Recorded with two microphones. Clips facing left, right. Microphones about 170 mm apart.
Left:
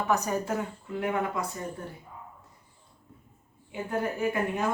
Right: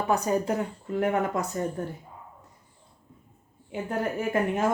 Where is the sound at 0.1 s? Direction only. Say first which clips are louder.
Right 4 dB; 30° right (ahead or behind).